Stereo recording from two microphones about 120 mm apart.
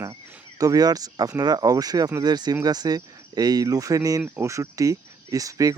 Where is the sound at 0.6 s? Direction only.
30° right (ahead or behind).